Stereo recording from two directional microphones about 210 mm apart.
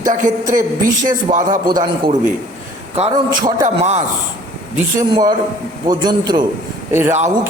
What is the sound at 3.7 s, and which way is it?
Speech, 30° right (ahead or behind).